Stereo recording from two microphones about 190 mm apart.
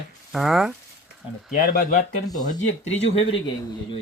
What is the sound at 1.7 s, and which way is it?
Speech, 45° left (ahead or behind).